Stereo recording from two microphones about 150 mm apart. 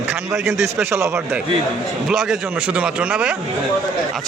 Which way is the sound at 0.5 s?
15° right (ahead or behind).